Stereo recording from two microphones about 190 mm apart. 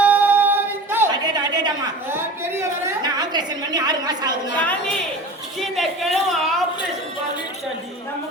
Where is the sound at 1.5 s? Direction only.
15° right (ahead or behind).